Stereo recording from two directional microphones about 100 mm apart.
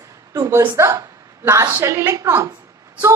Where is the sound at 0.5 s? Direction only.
25° right (ahead or behind).